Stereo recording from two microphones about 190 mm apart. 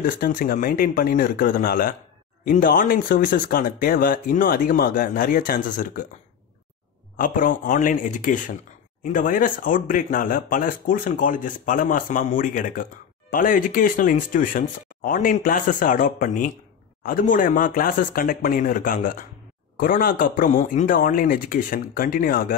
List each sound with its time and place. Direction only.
0.0 s speech: 45° left (ahead or behind)
7.2 s speech: 45° left (ahead or behind)